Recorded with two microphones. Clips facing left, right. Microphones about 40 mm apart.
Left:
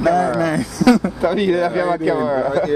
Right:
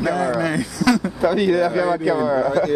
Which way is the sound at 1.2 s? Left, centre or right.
Centre.